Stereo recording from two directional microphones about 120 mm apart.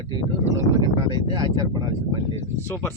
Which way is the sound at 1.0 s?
40° right (ahead or behind).